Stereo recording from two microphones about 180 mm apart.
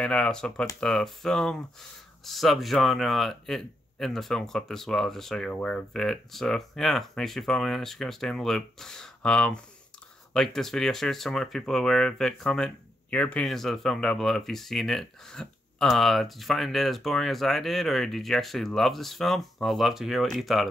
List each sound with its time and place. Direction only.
0.0 s speech: 5° left (ahead or behind)